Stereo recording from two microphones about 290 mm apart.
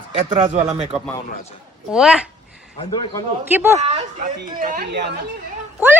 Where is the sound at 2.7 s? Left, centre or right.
Centre.